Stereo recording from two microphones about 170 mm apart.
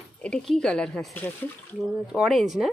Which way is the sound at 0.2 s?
5° left (ahead or behind).